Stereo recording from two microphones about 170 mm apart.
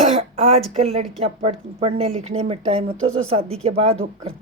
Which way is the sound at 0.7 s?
35° right (ahead or behind).